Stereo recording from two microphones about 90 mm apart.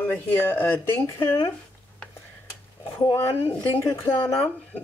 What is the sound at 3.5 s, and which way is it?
Speech, 25° left (ahead or behind).